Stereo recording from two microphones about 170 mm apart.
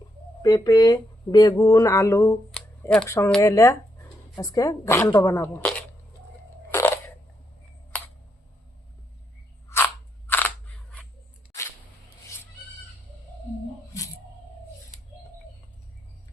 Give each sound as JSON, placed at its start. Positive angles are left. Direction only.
{"t": 0.4, "sound": "speech", "side_deg": 20}
{"t": 2.5, "sound": "shuffling cards", "side_deg": 5}
{"t": 3.1, "sound": "speech", "side_deg": 15}
{"t": 6.7, "sound": "a sound", "side_deg": 15}
{"t": 9.6, "sound": "scissors", "side_deg": 15}